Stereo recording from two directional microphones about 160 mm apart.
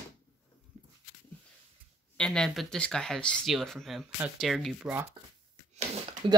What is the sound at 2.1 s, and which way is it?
Speech, 5° left (ahead or behind).